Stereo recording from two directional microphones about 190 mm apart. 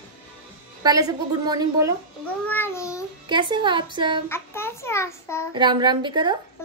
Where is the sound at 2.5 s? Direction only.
10° left (ahead or behind).